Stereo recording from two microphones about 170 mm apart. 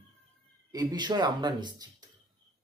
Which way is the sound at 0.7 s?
20° right (ahead or behind).